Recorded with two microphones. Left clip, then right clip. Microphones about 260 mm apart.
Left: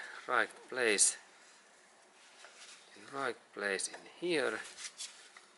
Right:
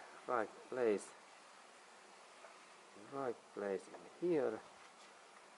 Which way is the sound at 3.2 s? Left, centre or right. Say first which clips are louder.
Left 5 dB; centre.